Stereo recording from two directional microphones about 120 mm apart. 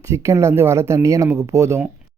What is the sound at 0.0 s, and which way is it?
Speech, 25° right (ahead or behind).